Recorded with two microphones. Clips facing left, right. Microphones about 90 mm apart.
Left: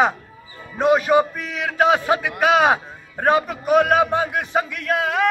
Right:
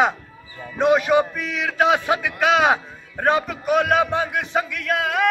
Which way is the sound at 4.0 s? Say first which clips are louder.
Left 2 dB; 10° left (ahead or behind).